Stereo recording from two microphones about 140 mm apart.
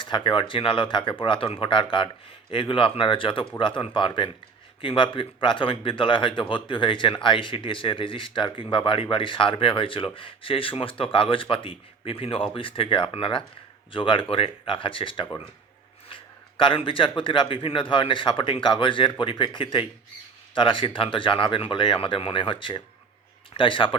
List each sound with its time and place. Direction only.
0.0 s speech: 35° left (ahead or behind)
16.6 s speech: 40° left (ahead or behind)